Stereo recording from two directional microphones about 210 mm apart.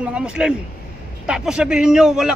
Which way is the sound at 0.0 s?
5° right (ahead or behind).